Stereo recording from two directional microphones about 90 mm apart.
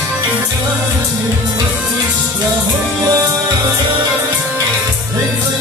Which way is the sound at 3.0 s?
35° right (ahead or behind).